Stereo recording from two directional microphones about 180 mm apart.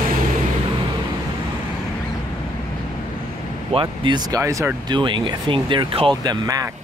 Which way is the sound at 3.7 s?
25° right (ahead or behind).